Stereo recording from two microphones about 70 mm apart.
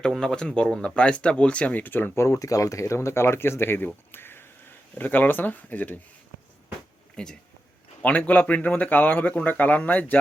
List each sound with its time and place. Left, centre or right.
0.0 s speech: centre; by 2.2 s left
2.2 s a man's voice: left
7.2 s speech: centre
8.0 s a man's voice: left